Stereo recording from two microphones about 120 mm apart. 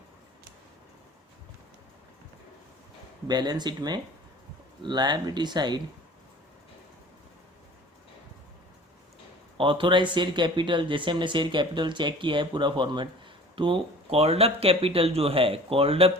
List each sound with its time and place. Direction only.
3.2 s speech: 35° right (ahead or behind)
9.6 s speech: 45° right (ahead or behind)